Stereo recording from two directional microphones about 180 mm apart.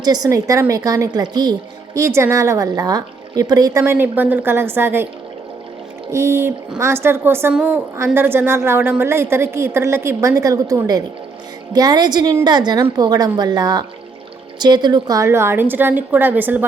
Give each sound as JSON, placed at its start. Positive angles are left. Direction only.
{"t": 0.0, "sound": "a woman's voice", "side_deg": -20}
{"t": 6.1, "sound": "a woman's voice", "side_deg": -15}